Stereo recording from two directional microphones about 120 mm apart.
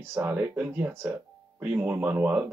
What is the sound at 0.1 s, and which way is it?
Speech, 15° right (ahead or behind).